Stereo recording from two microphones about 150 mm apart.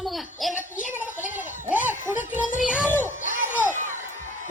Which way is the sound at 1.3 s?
10° right (ahead or behind).